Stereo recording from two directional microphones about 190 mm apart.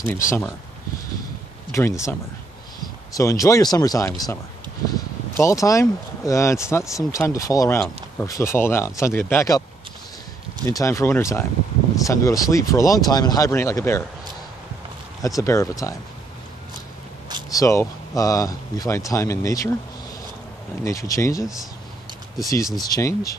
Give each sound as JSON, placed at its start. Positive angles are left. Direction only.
{"t": 0.0, "sound": "speech", "side_deg": 15}
{"t": 1.7, "sound": "speech", "side_deg": 15}
{"t": 5.4, "sound": "speech", "side_deg": 15}
{"t": 10.6, "sound": "speech", "side_deg": 15}
{"t": 15.2, "sound": "speech", "side_deg": 15}
{"t": 17.5, "sound": "speech", "side_deg": 15}
{"t": 20.8, "sound": "speech", "side_deg": 15}
{"t": 22.8, "sound": "speech", "side_deg": 20}